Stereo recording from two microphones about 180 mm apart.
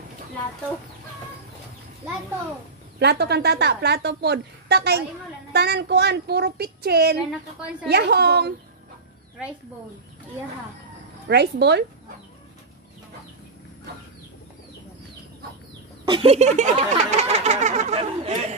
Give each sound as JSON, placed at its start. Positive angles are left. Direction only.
{"t": 3.0, "sound": "a woman's voice", "side_deg": -65}
{"t": 9.4, "sound": "speech", "side_deg": -5}
{"t": 11.2, "sound": "speech", "side_deg": -70}
{"t": 16.1, "sound": "a sound", "side_deg": -30}